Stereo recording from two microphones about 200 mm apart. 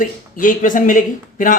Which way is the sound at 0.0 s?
40° left (ahead or behind).